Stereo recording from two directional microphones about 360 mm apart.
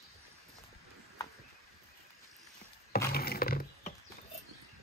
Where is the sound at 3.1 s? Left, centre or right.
Left.